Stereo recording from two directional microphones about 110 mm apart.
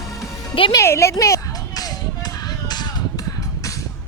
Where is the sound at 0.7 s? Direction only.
25° left (ahead or behind).